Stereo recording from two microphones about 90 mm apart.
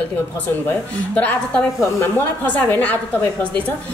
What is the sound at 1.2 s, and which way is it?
A woman's voice, 15° left (ahead or behind).